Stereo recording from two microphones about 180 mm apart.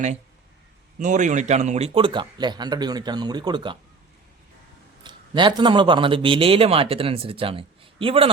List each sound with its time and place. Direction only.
0.9 s a man's voice: 45° right (ahead or behind); by 3.8 s 25° right (ahead or behind)
5.0 s a man's voice: 25° right (ahead or behind)